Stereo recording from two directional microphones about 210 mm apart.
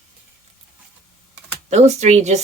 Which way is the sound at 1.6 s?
35° right (ahead or behind).